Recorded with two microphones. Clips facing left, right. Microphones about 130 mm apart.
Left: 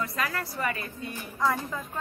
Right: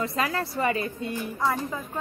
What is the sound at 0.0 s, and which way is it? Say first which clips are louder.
Speech: right 4 dB; 25° right (ahead or behind).